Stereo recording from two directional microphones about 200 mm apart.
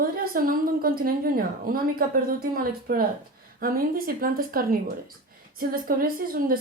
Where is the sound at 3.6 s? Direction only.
45° right (ahead or behind).